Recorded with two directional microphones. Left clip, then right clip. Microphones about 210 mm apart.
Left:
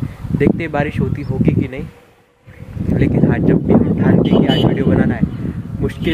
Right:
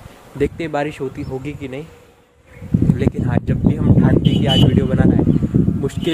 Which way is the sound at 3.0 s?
10° right (ahead or behind).